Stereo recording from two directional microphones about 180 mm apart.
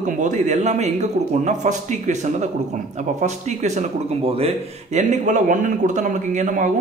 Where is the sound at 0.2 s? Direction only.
40° right (ahead or behind).